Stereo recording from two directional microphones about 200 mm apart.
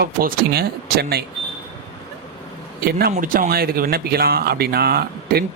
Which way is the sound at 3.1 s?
45° right (ahead or behind).